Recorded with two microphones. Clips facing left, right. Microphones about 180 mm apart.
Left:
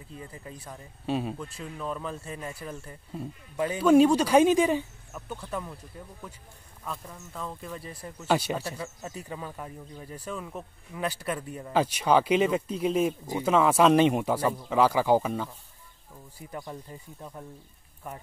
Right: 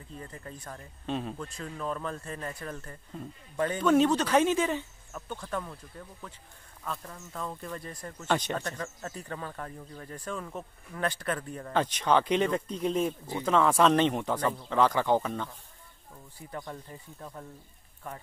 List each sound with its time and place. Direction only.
0.1 s speech: 10° left (ahead or behind)